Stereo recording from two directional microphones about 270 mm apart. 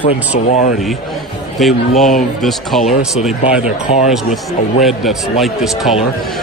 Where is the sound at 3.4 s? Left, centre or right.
Left.